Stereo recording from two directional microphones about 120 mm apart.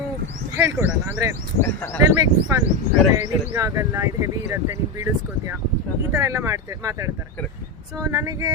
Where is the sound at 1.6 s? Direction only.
20° left (ahead or behind).